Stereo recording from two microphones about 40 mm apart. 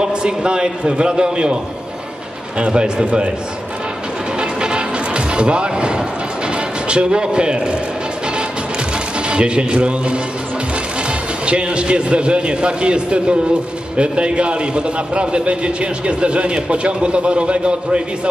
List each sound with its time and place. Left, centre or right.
0.0 s a man's voice: right
2.6 s a man's voice: right
4.4 s music: right
6.5 s a man's voice: right
9.3 s a man's voice: right
11.4 s a man's voice: right